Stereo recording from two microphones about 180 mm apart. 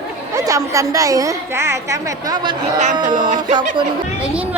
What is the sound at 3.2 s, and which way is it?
Music, 40° right (ahead or behind).